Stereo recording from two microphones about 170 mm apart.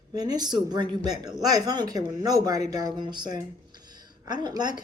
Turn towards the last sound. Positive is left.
turn(degrees=-25)  # may be behind; listen again after turning